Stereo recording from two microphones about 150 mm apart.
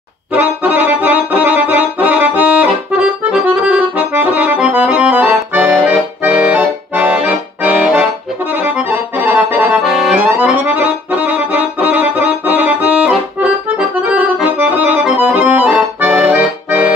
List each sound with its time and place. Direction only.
0.3 s accordion: 10° right (ahead or behind)